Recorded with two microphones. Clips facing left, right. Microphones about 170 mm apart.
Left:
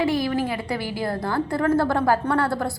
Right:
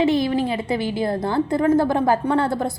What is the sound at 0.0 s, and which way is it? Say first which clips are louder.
A woman's voice: right 3 dB; 20° right (ahead or behind).